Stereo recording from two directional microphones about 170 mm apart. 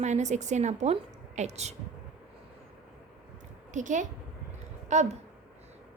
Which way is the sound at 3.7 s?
45° right (ahead or behind).